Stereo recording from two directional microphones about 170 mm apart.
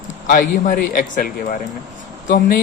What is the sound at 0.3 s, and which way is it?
A man's voice, 50° left (ahead or behind).